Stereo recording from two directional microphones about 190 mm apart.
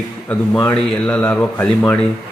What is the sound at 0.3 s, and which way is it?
A man's voice, 5° left (ahead or behind).